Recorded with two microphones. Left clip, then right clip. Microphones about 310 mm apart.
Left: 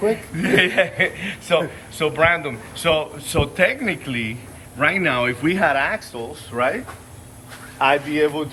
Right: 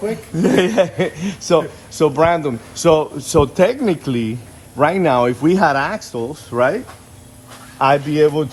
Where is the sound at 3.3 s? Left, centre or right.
Centre.